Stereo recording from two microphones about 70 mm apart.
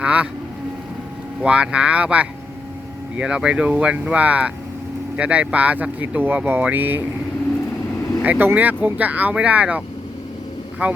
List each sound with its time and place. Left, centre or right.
0.0 s speech: centre
1.4 s speech: centre
8.2 s speech: right